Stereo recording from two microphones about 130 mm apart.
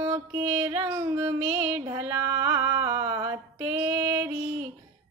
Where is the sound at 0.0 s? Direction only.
20° right (ahead or behind).